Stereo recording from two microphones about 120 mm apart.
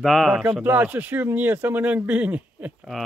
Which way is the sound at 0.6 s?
15° right (ahead or behind).